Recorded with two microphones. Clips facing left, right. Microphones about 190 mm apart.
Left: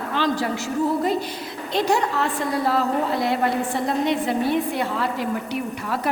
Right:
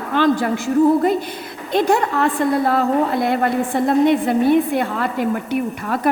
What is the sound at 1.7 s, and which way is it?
A woman's voice, 55° right (ahead or behind).